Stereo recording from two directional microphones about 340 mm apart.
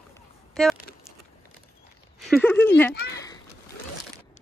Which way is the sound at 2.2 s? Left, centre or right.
Centre.